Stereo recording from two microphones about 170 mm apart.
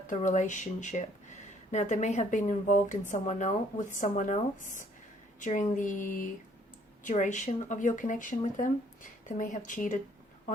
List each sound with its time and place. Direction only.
0.1 s speech: 45° left (ahead or behind)